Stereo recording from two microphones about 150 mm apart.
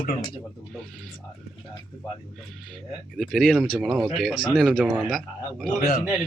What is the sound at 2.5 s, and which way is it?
Speech, centre (ahead or behind).